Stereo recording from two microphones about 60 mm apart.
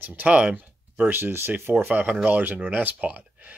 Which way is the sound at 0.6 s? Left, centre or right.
Right.